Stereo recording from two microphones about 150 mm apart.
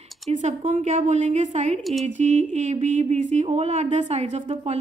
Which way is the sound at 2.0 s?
50° right (ahead or behind).